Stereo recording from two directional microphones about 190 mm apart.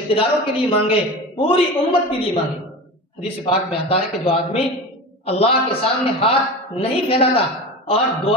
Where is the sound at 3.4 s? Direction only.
30° left (ahead or behind).